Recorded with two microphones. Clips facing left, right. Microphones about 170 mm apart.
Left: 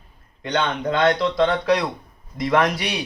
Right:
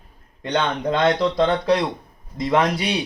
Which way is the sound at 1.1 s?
35° right (ahead or behind).